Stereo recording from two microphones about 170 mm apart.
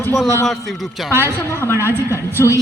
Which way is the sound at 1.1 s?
15° right (ahead or behind).